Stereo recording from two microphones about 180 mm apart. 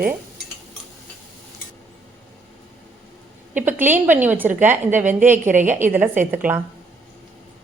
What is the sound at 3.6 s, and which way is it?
A woman's voice, 10° right (ahead or behind).